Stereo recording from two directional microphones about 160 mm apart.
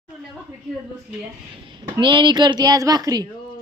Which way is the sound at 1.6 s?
30° right (ahead or behind).